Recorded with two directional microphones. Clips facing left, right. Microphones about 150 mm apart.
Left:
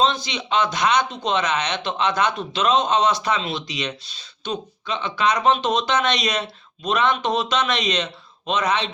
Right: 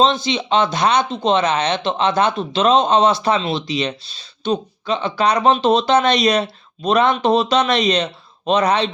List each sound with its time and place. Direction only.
0.0 s speech: 25° right (ahead or behind)